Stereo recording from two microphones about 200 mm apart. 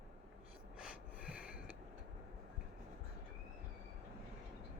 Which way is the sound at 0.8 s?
5° right (ahead or behind).